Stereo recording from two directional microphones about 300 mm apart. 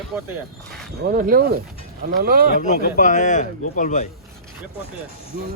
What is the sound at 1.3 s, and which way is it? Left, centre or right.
Speech, right.